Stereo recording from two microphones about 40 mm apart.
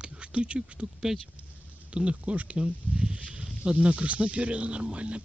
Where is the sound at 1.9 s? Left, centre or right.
Right.